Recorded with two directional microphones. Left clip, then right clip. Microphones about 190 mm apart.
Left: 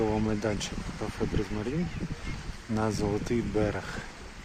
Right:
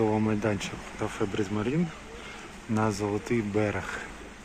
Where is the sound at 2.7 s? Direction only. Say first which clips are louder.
Right 1 dB; 20° left (ahead or behind).